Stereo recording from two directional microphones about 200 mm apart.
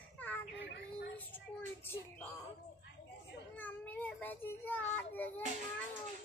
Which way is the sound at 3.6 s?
10° left (ahead or behind).